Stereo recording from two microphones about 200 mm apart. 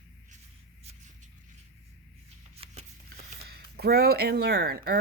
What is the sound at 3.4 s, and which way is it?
Speech, 50° right (ahead or behind).